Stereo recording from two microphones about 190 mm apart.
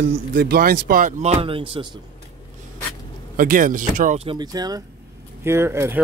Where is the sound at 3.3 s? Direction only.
45° right (ahead or behind); by 6.0 s 15° right (ahead or behind).